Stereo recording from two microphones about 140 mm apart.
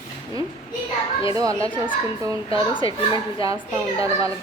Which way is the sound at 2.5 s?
35° left (ahead or behind).